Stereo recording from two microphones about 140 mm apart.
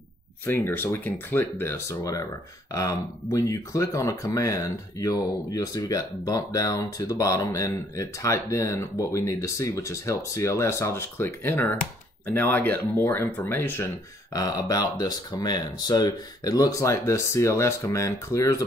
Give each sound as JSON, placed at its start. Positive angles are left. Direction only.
{"t": 0.5, "sound": "speech", "side_deg": 15}
{"t": 14.3, "sound": "speech", "side_deg": 25}